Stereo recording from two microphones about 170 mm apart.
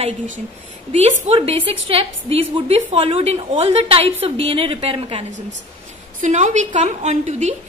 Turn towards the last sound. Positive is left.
turn(degrees=-40)  # may be behind; listen again after turning